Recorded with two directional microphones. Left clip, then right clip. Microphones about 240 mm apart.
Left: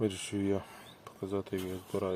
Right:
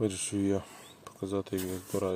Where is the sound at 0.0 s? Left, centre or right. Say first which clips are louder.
Right 2 dB; right.